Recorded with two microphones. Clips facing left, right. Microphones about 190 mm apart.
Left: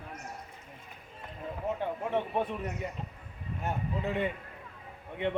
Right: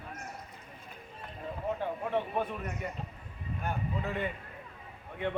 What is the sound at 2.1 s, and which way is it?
A man's voice, 20° left (ahead or behind).